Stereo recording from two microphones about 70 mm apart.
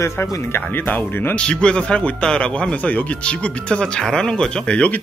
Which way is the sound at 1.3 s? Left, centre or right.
Centre.